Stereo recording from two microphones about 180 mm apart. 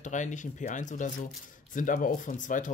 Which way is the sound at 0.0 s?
45° left (ahead or behind).